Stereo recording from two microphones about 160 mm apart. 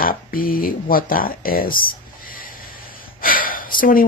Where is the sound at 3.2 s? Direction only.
60° left (ahead or behind).